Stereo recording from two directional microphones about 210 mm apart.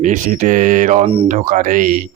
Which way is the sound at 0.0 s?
35° right (ahead or behind).